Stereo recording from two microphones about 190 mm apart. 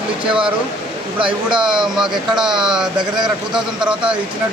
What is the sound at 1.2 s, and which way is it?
Speech, 25° right (ahead or behind).